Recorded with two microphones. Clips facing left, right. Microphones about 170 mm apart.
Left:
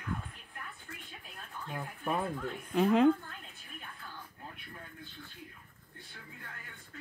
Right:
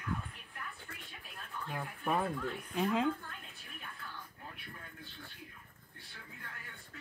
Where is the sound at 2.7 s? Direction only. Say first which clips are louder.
Left 8 dB; 60° left (ahead or behind).